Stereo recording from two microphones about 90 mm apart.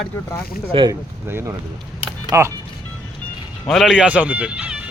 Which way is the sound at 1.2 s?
25° right (ahead or behind).